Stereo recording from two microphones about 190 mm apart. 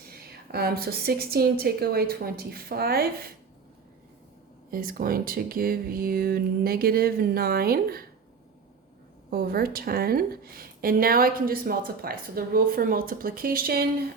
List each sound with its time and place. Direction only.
0.1 s a woman's voice: 55° right (ahead or behind)
4.7 s a woman's voice: 50° right (ahead or behind)
9.3 s a woman's voice: 50° right (ahead or behind)